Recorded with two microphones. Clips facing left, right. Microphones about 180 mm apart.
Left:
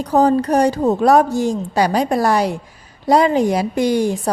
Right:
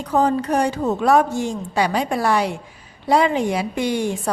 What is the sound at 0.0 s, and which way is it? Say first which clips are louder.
A woman's voice: left 4 dB; 35° left (ahead or behind).